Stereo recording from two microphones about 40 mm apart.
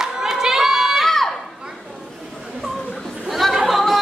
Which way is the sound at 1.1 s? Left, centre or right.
Centre.